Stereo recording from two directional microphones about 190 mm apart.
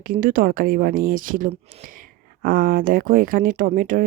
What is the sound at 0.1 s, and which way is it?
Speech, 45° right (ahead or behind).